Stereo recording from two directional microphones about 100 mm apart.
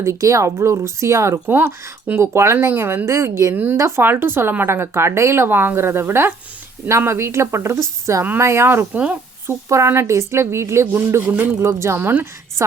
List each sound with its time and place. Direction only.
0.0 s speech: 30° right (ahead or behind); by 9.1 s 15° right (ahead or behind)
9.5 s speech: 30° right (ahead or behind)